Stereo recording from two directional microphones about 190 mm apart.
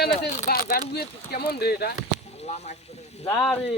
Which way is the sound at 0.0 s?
55° left (ahead or behind).